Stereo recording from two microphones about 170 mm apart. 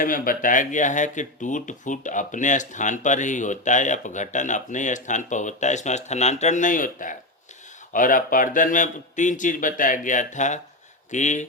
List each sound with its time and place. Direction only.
0.0 s speech: 55° left (ahead or behind)